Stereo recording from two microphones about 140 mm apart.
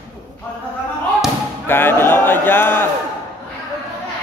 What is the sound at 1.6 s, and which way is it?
A man's voice, 15° left (ahead or behind).